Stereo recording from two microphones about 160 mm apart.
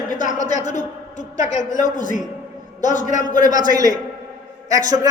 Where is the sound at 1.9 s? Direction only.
55° left (ahead or behind).